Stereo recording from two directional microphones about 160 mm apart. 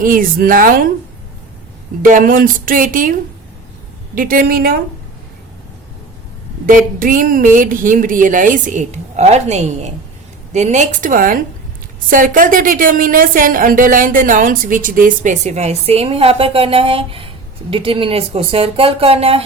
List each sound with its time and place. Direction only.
0.0 s a woman's voice: 60° right (ahead or behind)
2.0 s a woman's voice: 60° right (ahead or behind)
6.7 s a woman's voice: 60° right (ahead or behind); by 19.4 s 40° right (ahead or behind)